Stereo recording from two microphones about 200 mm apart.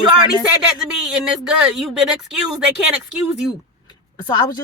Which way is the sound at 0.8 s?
5° right (ahead or behind).